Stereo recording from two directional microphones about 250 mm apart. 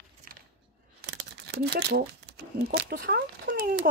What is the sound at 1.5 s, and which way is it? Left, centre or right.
Speech, right.